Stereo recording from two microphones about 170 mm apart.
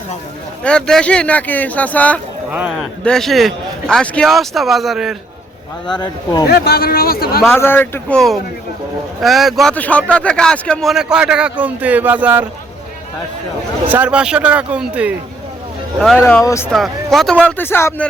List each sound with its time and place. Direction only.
0.6 s speech: 5° left (ahead or behind)
2.5 s speech: 10° right (ahead or behind)
3.0 s speech: 5° left (ahead or behind)
5.9 s speech: 25° left (ahead or behind)
6.5 s speech: 65° left (ahead or behind)
7.4 s speech: 15° left (ahead or behind)
9.2 s speech: centre (ahead or behind)
13.8 s speech: 10° right (ahead or behind)
16.2 s speech: 15° left (ahead or behind)
16.7 s speech: centre (ahead or behind)